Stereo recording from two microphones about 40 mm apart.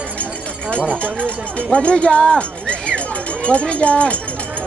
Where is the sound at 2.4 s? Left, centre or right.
Left.